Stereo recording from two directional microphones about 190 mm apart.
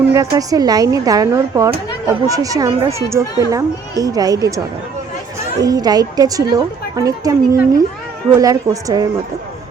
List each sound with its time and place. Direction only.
0.1 s a woman's voice: 20° right (ahead or behind)